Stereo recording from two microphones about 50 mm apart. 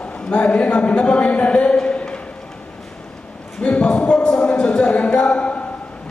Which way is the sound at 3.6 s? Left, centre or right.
Left.